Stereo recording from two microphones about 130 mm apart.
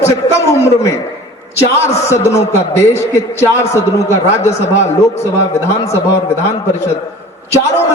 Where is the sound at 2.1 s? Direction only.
20° left (ahead or behind).